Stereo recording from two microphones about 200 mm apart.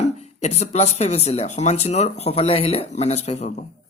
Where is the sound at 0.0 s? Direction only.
35° left (ahead or behind).